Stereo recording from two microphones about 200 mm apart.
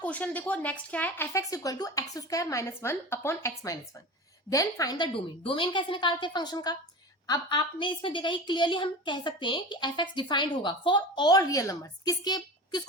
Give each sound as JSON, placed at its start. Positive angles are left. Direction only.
{"t": 0.0, "sound": "a woman's voice", "side_deg": 5}